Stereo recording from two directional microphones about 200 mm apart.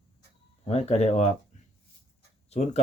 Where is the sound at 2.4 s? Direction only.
30° left (ahead or behind).